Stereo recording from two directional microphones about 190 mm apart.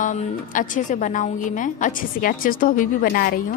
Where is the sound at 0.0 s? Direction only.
40° left (ahead or behind).